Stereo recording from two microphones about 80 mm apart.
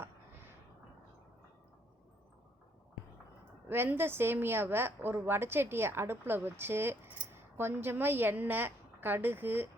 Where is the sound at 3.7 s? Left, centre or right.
Right.